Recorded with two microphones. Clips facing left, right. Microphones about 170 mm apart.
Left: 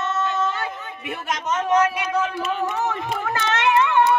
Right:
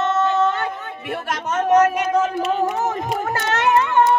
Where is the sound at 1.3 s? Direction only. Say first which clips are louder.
Right 3 dB; 55° right (ahead or behind).